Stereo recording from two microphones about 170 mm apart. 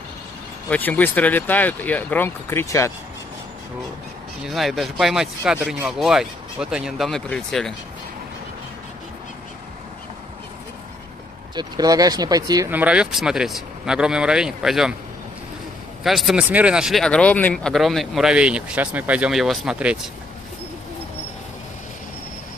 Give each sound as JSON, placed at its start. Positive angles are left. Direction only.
{"t": 0.7, "sound": "speech", "side_deg": 10}
{"t": 4.5, "sound": "speech", "side_deg": 0}
{"t": 11.5, "sound": "speech", "side_deg": -25}
{"t": 12.7, "sound": "speech", "side_deg": -5}
{"t": 16.0, "sound": "speech", "side_deg": 0}